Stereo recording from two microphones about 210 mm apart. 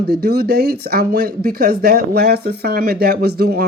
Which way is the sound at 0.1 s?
50° right (ahead or behind).